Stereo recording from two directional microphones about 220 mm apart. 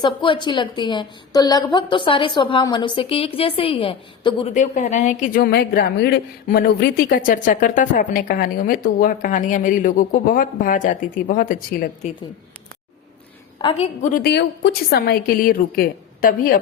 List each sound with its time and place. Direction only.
0.0 s a woman's voice: 20° left (ahead or behind)
4.5 s a woman's voice: 35° left (ahead or behind)
13.6 s a woman's voice: 25° left (ahead or behind); by 16.6 s 40° left (ahead or behind)